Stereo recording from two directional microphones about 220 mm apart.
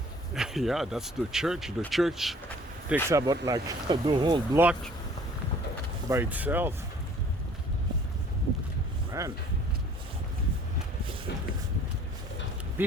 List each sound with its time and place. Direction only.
0.3 s speech: centre (ahead or behind)
2.9 s speech: 15° right (ahead or behind)
4.6 s speech: 5° right (ahead or behind)
6.1 s speech: 10° right (ahead or behind)
9.2 s speech: 15° right (ahead or behind)